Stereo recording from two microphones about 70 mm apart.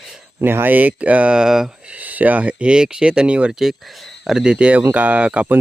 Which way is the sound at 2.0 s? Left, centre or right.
Right.